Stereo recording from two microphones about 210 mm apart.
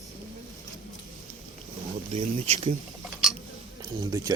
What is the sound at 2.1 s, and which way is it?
Speech, 25° right (ahead or behind).